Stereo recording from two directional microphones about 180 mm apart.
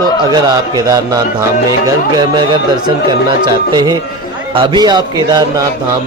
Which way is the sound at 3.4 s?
25° right (ahead or behind).